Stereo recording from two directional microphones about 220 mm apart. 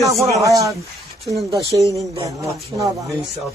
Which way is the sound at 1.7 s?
15° right (ahead or behind).